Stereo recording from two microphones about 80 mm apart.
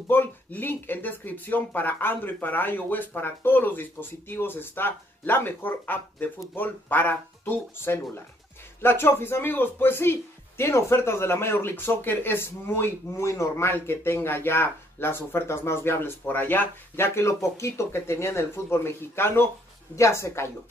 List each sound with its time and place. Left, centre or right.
0.1 s speech: left